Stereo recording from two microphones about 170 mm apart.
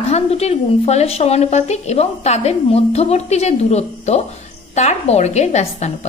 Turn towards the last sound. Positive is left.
turn(degrees=40)  # may be behind; listen again after turning